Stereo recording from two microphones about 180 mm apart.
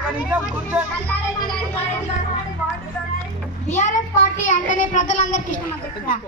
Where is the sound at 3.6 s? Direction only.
40° left (ahead or behind).